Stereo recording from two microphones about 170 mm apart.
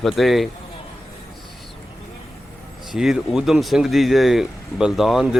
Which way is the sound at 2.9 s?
5° right (ahead or behind).